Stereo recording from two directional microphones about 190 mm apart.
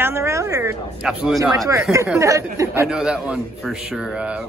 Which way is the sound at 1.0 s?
Centre (ahead or behind).